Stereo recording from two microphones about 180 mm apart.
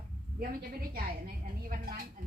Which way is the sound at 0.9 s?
55° right (ahead or behind).